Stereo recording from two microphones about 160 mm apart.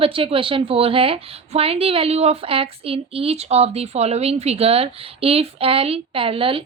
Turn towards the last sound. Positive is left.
turn(degrees=-35)  # may be behind; listen again after turning